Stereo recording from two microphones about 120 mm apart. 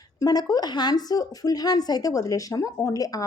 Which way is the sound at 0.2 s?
30° left (ahead or behind).